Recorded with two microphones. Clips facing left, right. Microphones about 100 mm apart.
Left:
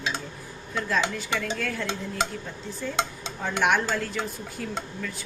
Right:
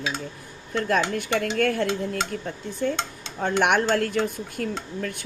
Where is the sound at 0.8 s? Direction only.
60° right (ahead or behind).